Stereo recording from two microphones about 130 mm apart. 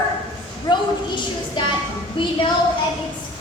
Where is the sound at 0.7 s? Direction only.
35° left (ahead or behind).